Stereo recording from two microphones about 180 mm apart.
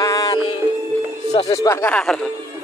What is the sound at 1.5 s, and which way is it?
Music, 15° left (ahead or behind).